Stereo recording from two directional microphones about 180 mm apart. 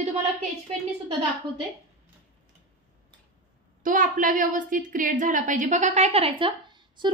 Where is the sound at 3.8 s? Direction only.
50° right (ahead or behind); by 7.0 s 25° right (ahead or behind).